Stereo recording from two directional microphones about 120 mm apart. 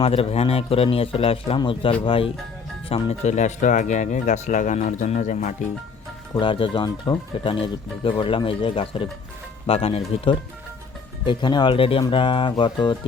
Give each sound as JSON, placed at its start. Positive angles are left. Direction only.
{"t": 0.0, "sound": "speech", "side_deg": 55}
{"t": 2.9, "sound": "speech", "side_deg": 65}
{"t": 6.4, "sound": "speech", "side_deg": 45}
{"t": 11.3, "sound": "speech", "side_deg": 40}